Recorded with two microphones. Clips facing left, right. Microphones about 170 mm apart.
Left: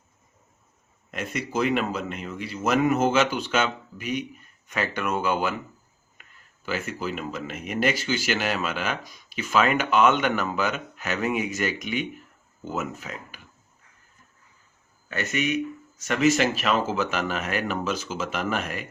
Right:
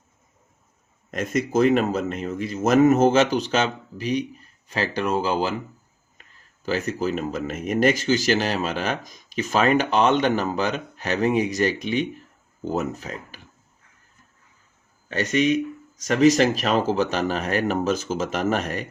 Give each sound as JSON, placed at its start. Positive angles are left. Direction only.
{"t": 1.1, "sound": "speech", "side_deg": -40}
{"t": 15.1, "sound": "speech", "side_deg": -35}